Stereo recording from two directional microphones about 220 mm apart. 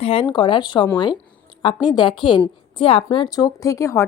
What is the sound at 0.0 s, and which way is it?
Speech, 25° left (ahead or behind).